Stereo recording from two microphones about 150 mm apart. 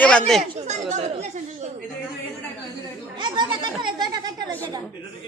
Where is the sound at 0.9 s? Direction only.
45° right (ahead or behind).